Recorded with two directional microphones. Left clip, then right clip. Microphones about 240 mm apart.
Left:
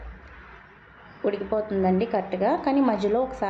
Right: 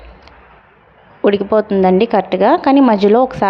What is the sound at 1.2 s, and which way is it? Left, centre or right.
A woman's voice, right.